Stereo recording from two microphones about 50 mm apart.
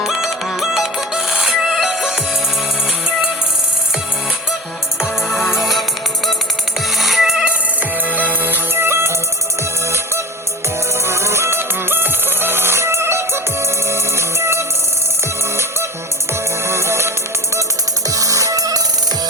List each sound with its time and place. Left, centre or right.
0.0 s music: centre
4.9 s music: centre
7.0 s music: centre
8.1 s music: right
11.0 s music: right
16.6 s music: right